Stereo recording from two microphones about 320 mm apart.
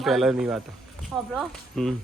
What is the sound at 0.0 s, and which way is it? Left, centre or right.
Speech, centre.